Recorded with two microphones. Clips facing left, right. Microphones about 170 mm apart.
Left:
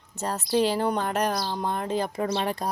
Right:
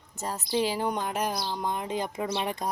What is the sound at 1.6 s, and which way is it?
Speech, 15° right (ahead or behind).